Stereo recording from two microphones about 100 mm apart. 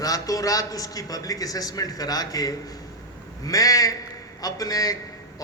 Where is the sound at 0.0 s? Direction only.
35° left (ahead or behind).